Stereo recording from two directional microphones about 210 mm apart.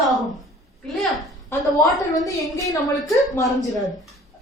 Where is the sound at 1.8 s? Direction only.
15° left (ahead or behind).